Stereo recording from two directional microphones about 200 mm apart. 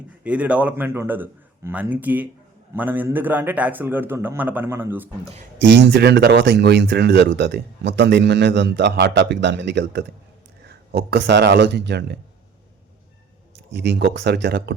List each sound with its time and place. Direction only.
0.3 s a man's voice: 5° right (ahead or behind)
5.7 s speech: 55° right (ahead or behind)
13.7 s speech: 55° right (ahead or behind)